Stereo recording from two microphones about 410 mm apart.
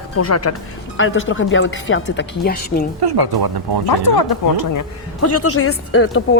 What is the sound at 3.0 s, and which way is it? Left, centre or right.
Speech, right.